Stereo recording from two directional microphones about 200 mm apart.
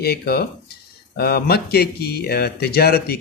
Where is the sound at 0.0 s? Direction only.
50° left (ahead or behind).